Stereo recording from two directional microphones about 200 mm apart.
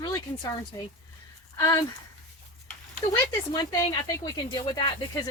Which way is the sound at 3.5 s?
20° left (ahead or behind).